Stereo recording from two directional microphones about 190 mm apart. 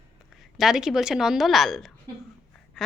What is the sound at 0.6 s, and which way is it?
A woman's voice, centre (ahead or behind).